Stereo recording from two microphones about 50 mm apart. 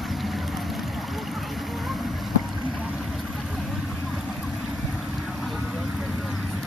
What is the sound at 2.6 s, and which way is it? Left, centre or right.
Boat, centre.